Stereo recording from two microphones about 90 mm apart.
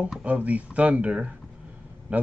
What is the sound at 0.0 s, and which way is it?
Speech, 15° right (ahead or behind).